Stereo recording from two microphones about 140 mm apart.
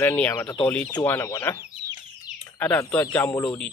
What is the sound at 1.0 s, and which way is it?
Speech, 20° left (ahead or behind).